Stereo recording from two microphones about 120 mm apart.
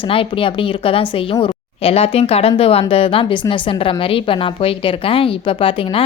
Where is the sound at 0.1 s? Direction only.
50° left (ahead or behind).